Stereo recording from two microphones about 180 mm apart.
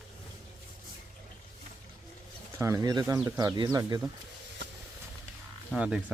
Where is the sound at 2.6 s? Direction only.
15° right (ahead or behind).